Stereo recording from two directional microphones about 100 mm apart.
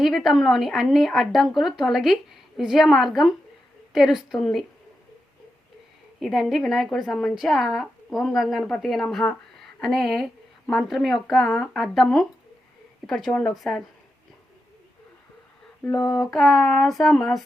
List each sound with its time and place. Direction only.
0.0 s a woman's voice: centre (ahead or behind)
6.1 s a woman's voice: centre (ahead or behind)
9.6 s a sound: 5° left (ahead or behind)
10.7 s a woman's voice: centre (ahead or behind)
16.0 s a sound: 45° left (ahead or behind)
16.3 s a woman's voice: 5° left (ahead or behind)